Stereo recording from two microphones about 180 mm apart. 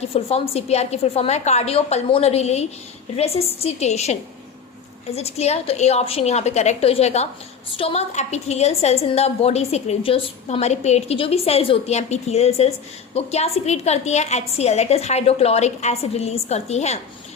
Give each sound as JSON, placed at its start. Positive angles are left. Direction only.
{"t": 0.1, "sound": "a woman's voice", "side_deg": 35}